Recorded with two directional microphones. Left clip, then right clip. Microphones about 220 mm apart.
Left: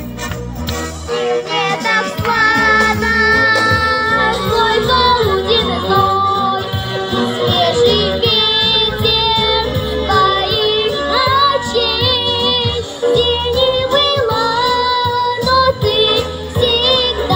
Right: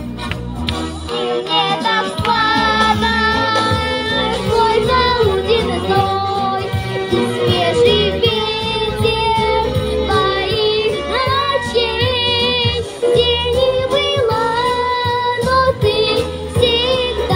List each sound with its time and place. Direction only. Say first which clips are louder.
1.2 s music: even; 40° left (ahead or behind); by 17.1 s 25° right (ahead or behind)